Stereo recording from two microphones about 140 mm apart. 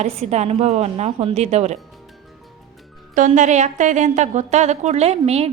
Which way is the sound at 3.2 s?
65° right (ahead or behind).